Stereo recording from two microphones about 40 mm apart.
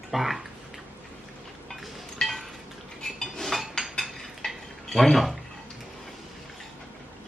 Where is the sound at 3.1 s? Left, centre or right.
Centre.